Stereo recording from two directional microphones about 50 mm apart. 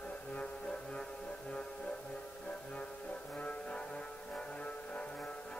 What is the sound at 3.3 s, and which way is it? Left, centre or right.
Music, left.